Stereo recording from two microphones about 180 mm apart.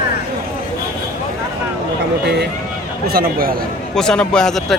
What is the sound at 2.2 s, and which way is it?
Speech, 70° right (ahead or behind).